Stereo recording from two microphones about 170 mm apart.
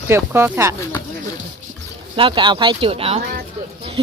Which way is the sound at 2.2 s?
30° right (ahead or behind).